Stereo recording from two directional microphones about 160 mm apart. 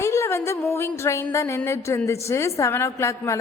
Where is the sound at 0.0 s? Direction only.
15° left (ahead or behind).